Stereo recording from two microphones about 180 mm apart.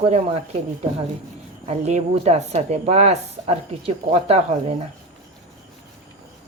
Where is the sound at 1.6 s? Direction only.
40° right (ahead or behind).